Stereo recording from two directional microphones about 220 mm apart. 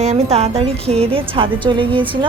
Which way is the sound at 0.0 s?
30° right (ahead or behind).